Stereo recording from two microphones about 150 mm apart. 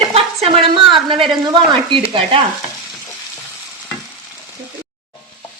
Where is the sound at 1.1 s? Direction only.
35° right (ahead or behind).